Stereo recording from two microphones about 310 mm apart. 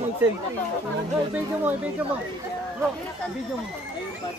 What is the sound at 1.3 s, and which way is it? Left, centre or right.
Speech, centre.